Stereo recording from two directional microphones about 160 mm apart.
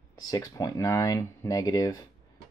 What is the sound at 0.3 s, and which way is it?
Speech, 25° left (ahead or behind).